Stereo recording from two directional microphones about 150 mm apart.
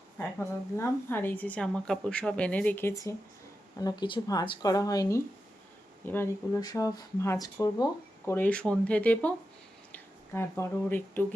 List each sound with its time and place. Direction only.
0.2 s a woman's voice: 15° left (ahead or behind)
8.2 s a woman's voice: 10° left (ahead or behind)